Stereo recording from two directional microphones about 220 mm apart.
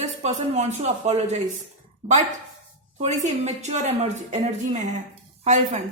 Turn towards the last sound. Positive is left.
turn(degrees=-35)  # may be behind; listen again after turning